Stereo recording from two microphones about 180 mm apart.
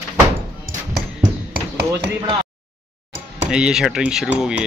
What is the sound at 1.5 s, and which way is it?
Hammer, 65° right (ahead or behind).